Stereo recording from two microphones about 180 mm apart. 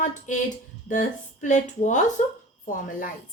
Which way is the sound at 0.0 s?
45° left (ahead or behind).